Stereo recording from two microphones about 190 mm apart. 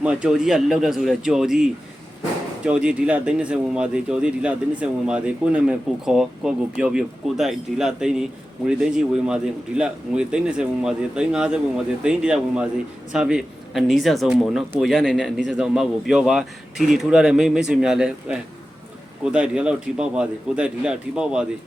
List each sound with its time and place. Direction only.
0.0 s speech: 5° right (ahead or behind)